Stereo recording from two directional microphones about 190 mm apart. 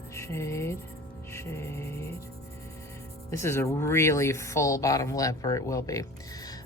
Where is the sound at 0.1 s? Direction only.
15° left (ahead or behind).